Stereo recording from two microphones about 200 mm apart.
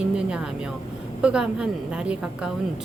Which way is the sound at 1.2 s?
5° right (ahead or behind).